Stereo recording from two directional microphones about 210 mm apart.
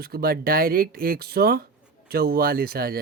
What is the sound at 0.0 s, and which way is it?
Speech, 45° right (ahead or behind).